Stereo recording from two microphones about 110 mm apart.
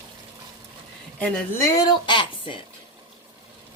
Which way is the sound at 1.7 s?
30° left (ahead or behind).